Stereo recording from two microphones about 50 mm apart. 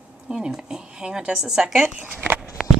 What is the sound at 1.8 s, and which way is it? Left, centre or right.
Speech, right.